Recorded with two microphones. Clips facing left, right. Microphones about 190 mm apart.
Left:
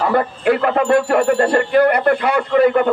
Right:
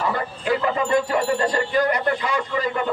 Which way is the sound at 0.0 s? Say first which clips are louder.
Left 9 dB; 60° left (ahead or behind).